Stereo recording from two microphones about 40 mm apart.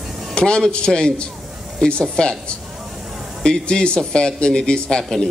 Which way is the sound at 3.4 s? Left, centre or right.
Left.